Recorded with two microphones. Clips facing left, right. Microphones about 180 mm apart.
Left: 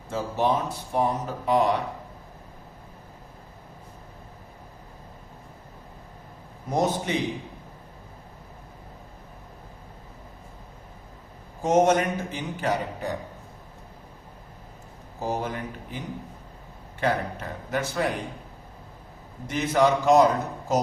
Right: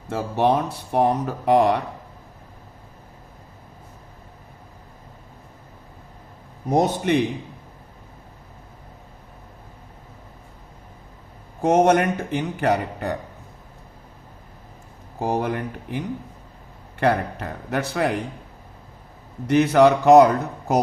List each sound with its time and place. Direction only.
0.1 s speech: 65° right (ahead or behind)
6.7 s a man's voice: 65° right (ahead or behind)
11.6 s a man's voice: 60° right (ahead or behind)
15.2 s speech: 65° right (ahead or behind)
17.0 s a man's voice: 65° right (ahead or behind)
19.5 s a man's voice: 65° right (ahead or behind)